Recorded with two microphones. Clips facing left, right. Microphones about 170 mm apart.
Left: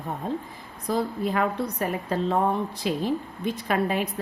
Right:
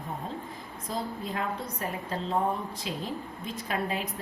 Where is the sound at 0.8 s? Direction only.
70° left (ahead or behind).